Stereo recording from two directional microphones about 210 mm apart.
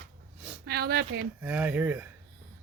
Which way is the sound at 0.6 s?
50° right (ahead or behind).